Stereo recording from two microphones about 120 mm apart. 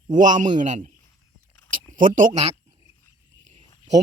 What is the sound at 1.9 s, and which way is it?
Speech, 90° right.